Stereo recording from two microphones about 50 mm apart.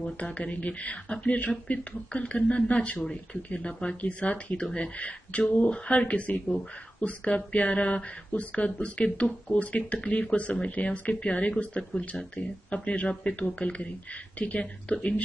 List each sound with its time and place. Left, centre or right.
0.0 s speech: left